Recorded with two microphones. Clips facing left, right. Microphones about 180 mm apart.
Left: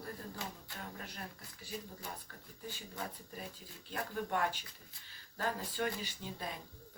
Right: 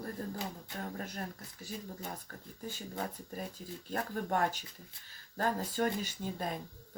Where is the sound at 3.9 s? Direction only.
45° right (ahead or behind).